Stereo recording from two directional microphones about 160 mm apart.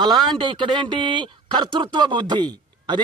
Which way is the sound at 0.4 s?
30° right (ahead or behind).